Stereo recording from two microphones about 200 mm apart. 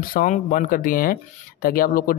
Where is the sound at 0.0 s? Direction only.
40° left (ahead or behind).